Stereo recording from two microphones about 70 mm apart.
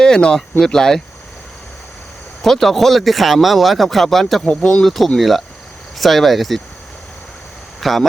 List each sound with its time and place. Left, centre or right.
0.0 s speech: centre
2.4 s speech: centre
4.4 s speech: centre
4.8 s speech: centre
7.8 s speech: centre